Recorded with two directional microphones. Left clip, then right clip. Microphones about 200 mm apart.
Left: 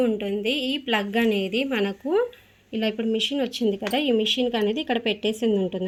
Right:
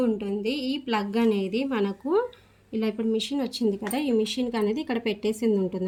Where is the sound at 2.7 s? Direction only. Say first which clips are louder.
Left 2 dB; 40° right (ahead or behind).